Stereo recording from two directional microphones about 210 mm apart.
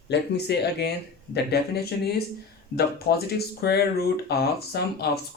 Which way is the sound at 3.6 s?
50° left (ahead or behind).